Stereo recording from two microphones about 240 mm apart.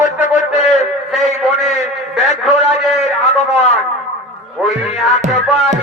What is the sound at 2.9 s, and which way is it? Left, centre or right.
Speech, left.